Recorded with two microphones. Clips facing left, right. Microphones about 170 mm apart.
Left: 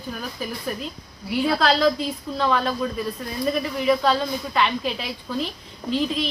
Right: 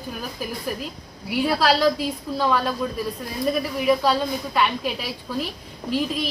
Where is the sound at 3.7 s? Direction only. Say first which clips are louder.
Even; 5° right (ahead or behind).